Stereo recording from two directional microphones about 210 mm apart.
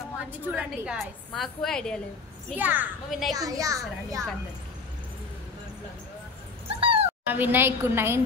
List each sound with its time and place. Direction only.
0.6 s a woman's voice: centre (ahead or behind)
2.5 s speech: 10° right (ahead or behind)
3.3 s speech: 15° right (ahead or behind)
6.8 s cat: 25° right (ahead or behind)
7.2 s speech: 10° right (ahead or behind)